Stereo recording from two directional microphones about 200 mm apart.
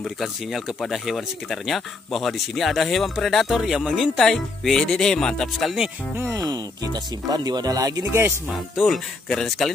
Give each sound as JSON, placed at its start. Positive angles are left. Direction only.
{"t": 0.0, "sound": "speech", "side_deg": 0}
{"t": 6.1, "sound": "speech", "side_deg": -15}
{"t": 8.8, "sound": "speech", "side_deg": 0}